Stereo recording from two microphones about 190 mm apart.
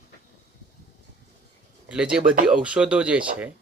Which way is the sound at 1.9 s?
5° right (ahead or behind).